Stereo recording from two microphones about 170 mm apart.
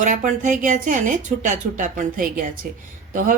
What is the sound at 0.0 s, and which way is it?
A woman's voice, 50° right (ahead or behind).